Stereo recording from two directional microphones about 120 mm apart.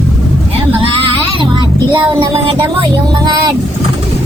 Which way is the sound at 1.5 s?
40° right (ahead or behind).